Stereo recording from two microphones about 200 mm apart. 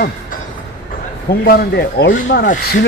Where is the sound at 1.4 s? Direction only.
50° left (ahead or behind).